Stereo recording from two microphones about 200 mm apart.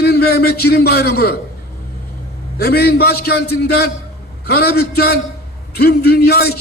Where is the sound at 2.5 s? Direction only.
50° left (ahead or behind).